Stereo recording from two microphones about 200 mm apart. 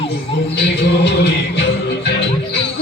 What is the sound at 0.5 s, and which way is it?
Music, 55° left (ahead or behind).